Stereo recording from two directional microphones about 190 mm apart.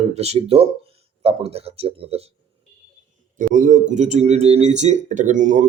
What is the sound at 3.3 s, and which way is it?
Speech, 40° right (ahead or behind).